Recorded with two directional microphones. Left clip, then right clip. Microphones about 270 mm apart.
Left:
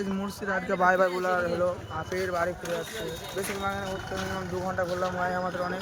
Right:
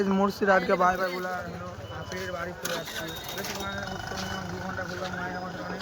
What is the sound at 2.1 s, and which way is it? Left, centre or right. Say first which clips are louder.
Speech: left 6 dB; centre.